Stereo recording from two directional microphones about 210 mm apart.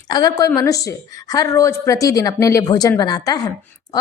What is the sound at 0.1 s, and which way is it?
Speech, 15° left (ahead or behind).